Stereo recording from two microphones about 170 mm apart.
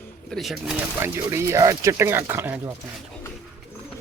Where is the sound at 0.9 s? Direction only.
15° right (ahead or behind).